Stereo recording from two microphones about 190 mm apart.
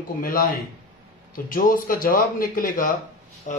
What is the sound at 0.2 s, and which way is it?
Speech, 50° left (ahead or behind).